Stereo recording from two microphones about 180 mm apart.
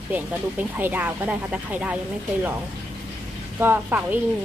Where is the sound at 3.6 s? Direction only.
10° right (ahead or behind).